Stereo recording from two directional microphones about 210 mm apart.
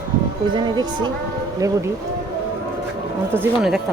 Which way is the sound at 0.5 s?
20° right (ahead or behind).